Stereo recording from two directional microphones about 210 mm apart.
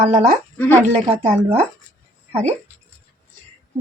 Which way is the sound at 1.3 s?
30° right (ahead or behind).